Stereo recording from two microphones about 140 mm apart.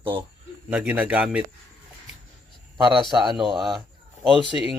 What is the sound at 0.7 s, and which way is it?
Speech, 10° right (ahead or behind).